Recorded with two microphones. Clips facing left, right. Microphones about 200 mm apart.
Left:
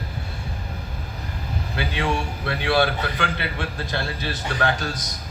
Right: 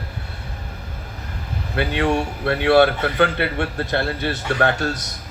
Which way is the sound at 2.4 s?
60° right (ahead or behind).